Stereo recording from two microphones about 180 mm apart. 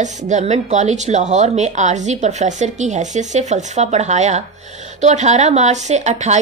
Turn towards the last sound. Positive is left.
turn(degrees=-40)  # may be behind; listen again after turning